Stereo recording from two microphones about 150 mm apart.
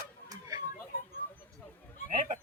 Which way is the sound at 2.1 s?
55° right (ahead or behind).